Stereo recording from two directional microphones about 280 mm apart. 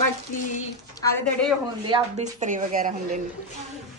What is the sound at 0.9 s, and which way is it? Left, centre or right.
Speech, centre.